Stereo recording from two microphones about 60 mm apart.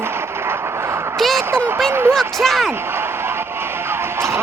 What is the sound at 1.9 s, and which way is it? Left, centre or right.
Speech, right.